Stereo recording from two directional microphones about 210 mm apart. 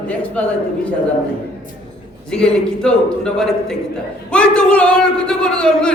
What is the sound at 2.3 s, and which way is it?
A man's voice, 5° left (ahead or behind).